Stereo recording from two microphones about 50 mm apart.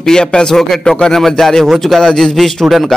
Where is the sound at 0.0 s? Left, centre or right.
Centre.